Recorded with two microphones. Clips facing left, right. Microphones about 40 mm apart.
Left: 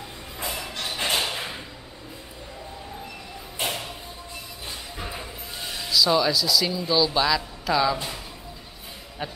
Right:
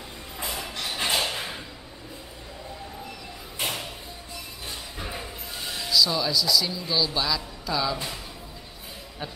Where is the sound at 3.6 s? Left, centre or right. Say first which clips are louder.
Left 2 dB; centre.